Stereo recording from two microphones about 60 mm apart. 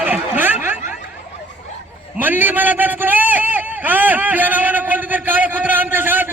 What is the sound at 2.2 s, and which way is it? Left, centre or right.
A man's voice, right.